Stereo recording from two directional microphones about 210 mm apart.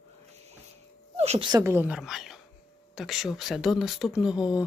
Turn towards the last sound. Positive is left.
turn(degrees=-5)  # may be behind; listen again after turning